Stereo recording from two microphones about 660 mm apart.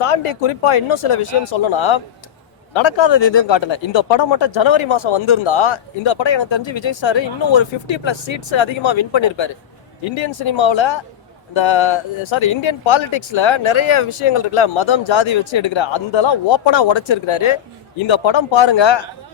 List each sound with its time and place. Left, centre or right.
0.0 s speech: left